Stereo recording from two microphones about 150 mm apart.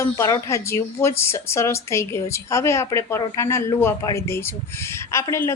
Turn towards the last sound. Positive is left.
turn(degrees=20)  # may be behind; listen again after turning